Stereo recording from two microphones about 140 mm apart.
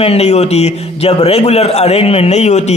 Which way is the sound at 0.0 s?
45° left (ahead or behind).